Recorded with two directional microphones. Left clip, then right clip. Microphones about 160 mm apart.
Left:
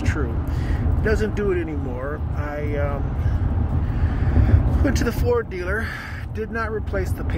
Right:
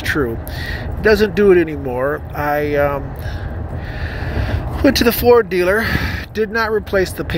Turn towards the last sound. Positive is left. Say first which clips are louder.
# right 10 dB
turn(degrees=-25)  # may be behind; listen again after turning